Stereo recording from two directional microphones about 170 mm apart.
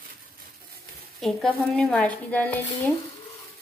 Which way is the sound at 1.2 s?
Centre (ahead or behind).